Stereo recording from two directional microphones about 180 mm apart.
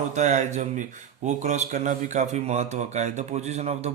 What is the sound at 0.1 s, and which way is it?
Speech, 40° right (ahead or behind).